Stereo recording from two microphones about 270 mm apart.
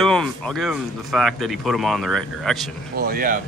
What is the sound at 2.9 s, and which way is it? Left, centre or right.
Speech, right.